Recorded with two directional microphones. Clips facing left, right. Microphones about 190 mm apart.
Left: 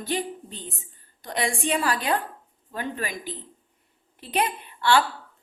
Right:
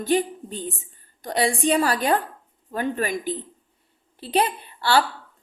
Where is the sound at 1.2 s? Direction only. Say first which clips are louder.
Right 5 dB; 35° right (ahead or behind).